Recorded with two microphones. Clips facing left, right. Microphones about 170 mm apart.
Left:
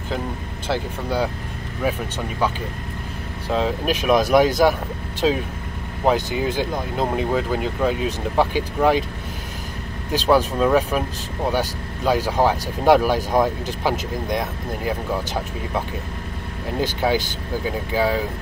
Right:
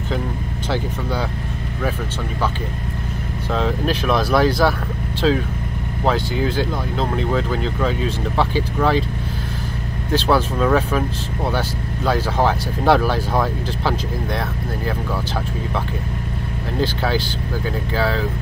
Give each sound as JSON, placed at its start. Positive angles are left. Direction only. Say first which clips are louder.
{"t": 0.7, "sound": "speech", "louder": "even", "side_deg": 10}
{"t": 3.4, "sound": "speech", "louder": "even", "side_deg": 10}
{"t": 10.2, "sound": "speech", "louder": "left 2 dB", "side_deg": 10}
{"t": 16.8, "sound": "speech", "louder": "left 1 dB", "side_deg": 15}